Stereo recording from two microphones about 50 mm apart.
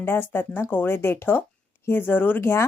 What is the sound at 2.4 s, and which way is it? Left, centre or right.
Speech, left.